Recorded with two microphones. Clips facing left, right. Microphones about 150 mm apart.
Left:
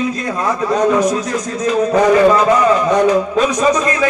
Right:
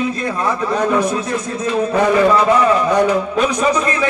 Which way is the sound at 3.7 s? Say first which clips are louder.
Left 2 dB; 30° right (ahead or behind).